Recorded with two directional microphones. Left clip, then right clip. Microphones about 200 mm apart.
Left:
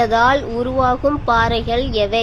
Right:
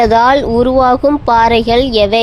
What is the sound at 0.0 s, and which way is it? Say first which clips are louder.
A woman's voice: right 6 dB; 35° right (ahead or behind).